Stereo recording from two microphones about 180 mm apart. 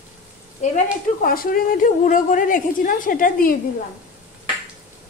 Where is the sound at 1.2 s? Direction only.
55° left (ahead or behind).